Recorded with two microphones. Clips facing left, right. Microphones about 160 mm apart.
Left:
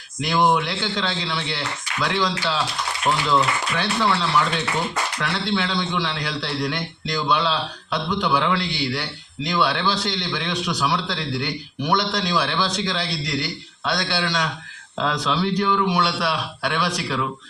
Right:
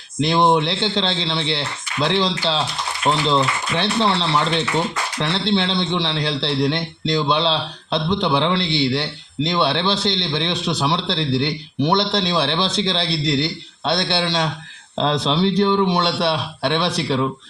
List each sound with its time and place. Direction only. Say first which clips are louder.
0.2 s a man's voice: right 3 dB; 25° right (ahead or behind)